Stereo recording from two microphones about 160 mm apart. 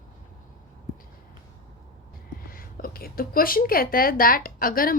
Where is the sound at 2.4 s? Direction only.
65° left (ahead or behind).